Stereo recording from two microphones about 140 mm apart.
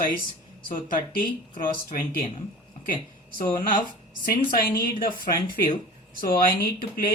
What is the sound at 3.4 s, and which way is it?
Speech, 85° left.